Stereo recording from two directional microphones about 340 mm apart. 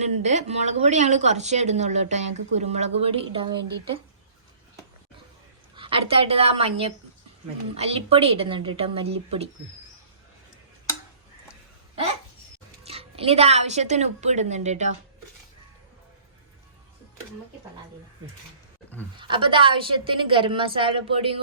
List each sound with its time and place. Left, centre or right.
0.0 s a woman's voice: centre
5.7 s a woman's voice: centre
12.8 s speech: centre
19.1 s a woman's voice: centre